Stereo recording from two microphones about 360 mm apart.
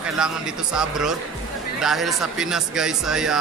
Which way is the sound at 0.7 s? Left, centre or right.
Centre.